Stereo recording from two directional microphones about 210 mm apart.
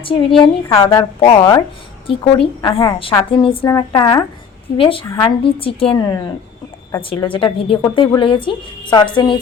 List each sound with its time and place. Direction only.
0.0 s a woman's voice: 25° left (ahead or behind)